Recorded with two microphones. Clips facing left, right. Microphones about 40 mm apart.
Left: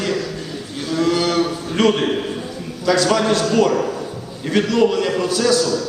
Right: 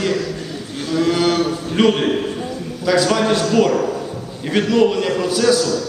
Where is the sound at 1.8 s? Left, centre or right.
Centre.